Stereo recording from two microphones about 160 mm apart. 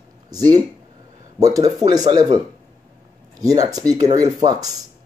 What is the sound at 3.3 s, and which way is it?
Speech, 20° right (ahead or behind).